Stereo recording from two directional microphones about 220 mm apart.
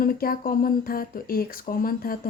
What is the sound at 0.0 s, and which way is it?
A woman's voice, 40° left (ahead or behind).